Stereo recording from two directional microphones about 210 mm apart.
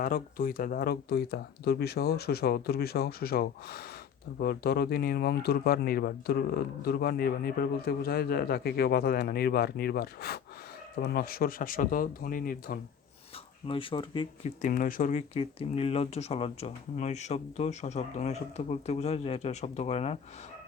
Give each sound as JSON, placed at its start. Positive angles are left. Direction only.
{"t": 0.0, "sound": "speech", "side_deg": 45}
{"t": 13.7, "sound": "speech", "side_deg": 25}
{"t": 14.6, "sound": "speech", "side_deg": 40}